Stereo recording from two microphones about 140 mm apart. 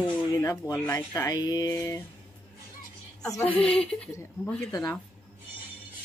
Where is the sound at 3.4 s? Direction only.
10° left (ahead or behind).